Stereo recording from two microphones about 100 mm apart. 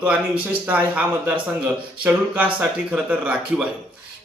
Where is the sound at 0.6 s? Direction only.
15° right (ahead or behind).